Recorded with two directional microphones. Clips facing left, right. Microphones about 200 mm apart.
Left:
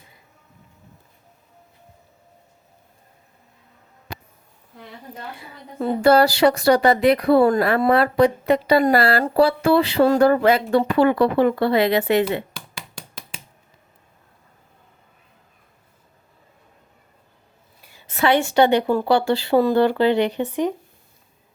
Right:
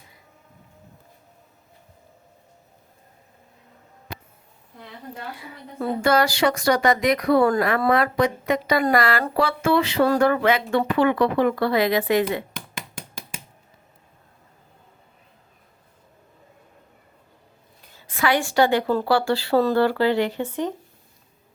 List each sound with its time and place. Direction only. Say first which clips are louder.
6.0 s a woman's voice: left 5 dB; 35° left (ahead or behind)
17.9 s a woman's voice: left 4 dB; 25° left (ahead or behind)